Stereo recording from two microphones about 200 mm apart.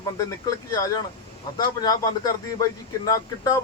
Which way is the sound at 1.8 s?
20° left (ahead or behind).